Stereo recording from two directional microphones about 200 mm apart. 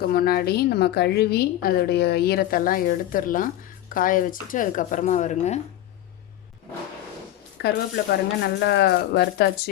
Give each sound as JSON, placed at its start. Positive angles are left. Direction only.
{"t": 0.0, "sound": "a woman's voice", "side_deg": 50}
{"t": 7.6, "sound": "speech", "side_deg": 55}